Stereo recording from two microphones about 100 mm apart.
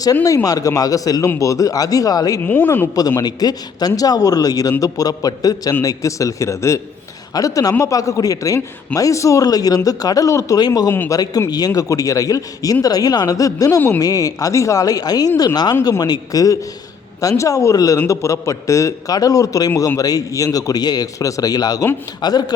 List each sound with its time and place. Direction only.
0.4 s a man's voice: 35° left (ahead or behind)
2.4 s speech: 20° left (ahead or behind)
3.2 s a man's voice: 40° left (ahead or behind)